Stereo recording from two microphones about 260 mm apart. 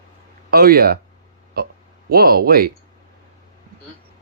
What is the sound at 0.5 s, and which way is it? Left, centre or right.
Speech, right.